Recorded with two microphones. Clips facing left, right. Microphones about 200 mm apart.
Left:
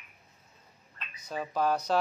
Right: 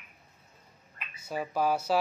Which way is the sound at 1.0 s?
10° right (ahead or behind).